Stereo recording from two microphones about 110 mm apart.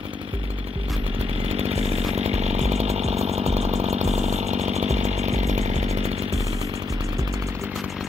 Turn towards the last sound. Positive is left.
turn(degrees=-75)  # may be behind; listen again after turning